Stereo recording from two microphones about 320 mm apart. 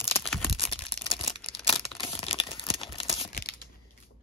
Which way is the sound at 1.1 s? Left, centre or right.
Centre.